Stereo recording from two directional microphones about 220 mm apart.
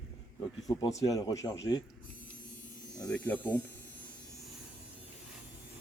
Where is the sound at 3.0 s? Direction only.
5° left (ahead or behind).